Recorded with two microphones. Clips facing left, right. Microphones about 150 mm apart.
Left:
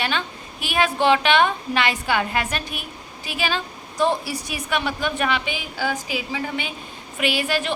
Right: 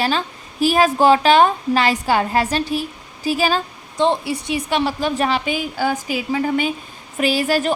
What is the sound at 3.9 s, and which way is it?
A woman's voice, 20° right (ahead or behind).